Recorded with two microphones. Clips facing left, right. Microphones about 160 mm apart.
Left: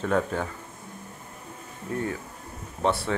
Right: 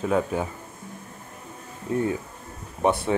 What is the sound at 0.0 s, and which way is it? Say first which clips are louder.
Speech: right 2 dB; 10° right (ahead or behind).